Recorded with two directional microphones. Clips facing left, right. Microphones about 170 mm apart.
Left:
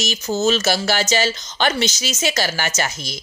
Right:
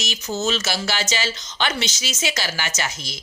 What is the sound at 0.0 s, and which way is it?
Speech, 40° left (ahead or behind).